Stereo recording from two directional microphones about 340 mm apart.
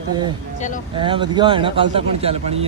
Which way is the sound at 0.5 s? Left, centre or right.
Left.